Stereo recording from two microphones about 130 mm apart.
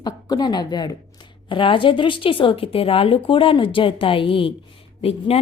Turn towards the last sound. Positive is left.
turn(degrees=50)  # may be behind; listen again after turning